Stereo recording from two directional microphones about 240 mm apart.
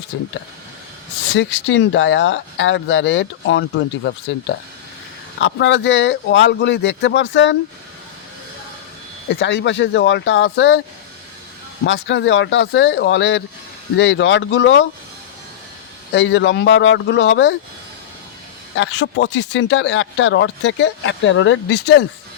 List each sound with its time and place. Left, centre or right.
0.1 s speech: left
1.3 s speech: left
9.3 s speech: left
11.8 s speech: left
16.1 s speech: left
18.7 s speech: left